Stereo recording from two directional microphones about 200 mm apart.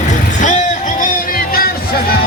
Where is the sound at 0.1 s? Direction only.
40° left (ahead or behind).